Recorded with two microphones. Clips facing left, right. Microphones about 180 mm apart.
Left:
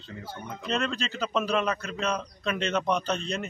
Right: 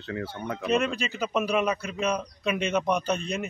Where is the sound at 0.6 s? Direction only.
10° right (ahead or behind).